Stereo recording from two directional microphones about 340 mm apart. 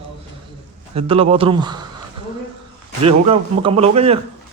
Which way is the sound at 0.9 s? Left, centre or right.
Centre.